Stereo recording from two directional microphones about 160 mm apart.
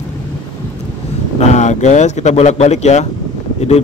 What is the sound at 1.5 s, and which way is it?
Speech, 45° left (ahead or behind).